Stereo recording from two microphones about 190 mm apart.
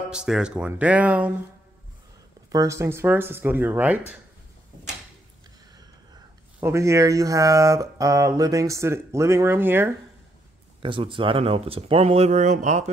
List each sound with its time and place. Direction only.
0.1 s speech: 5° right (ahead or behind)
2.5 s speech: 15° right (ahead or behind)
6.6 s speech: 15° right (ahead or behind)
10.8 s speech: 25° right (ahead or behind)